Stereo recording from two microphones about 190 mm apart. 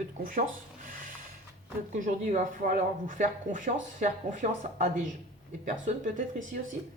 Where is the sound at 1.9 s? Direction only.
40° right (ahead or behind).